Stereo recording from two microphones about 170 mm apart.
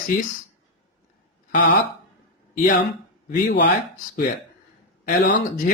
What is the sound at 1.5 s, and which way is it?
Speech, 50° left (ahead or behind).